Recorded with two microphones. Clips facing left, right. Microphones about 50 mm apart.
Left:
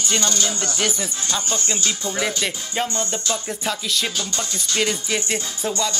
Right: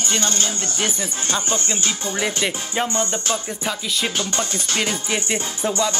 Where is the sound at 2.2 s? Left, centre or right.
Centre.